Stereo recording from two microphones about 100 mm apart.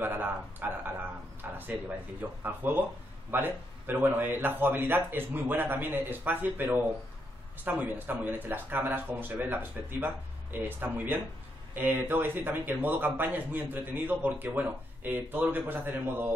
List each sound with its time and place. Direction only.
0.0 s speech: 20° right (ahead or behind)
1.4 s a sound: 20° right (ahead or behind)
2.4 s speech: 20° right (ahead or behind)